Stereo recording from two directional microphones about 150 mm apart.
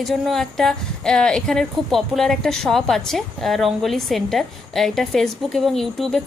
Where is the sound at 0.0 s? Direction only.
Centre (ahead or behind).